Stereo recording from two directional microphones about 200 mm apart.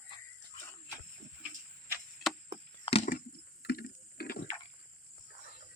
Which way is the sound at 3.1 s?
50° left (ahead or behind).